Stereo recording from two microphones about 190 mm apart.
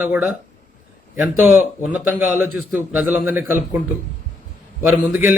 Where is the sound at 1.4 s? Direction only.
10° right (ahead or behind).